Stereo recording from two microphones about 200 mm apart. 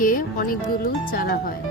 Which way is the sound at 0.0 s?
45° left (ahead or behind).